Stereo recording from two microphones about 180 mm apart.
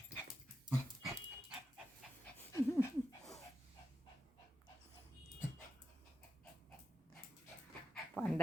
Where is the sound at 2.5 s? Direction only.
15° left (ahead or behind).